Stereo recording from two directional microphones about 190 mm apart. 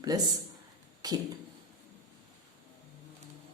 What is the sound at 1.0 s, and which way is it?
Speech, 20° right (ahead or behind).